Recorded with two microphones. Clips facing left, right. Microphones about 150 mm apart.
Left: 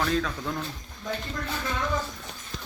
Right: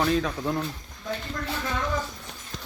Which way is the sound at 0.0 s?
20° right (ahead or behind).